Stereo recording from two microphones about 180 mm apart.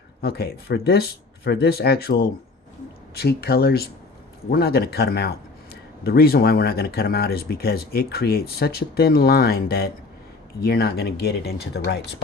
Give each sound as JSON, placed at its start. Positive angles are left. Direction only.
{"t": 0.2, "sound": "speech", "side_deg": 60}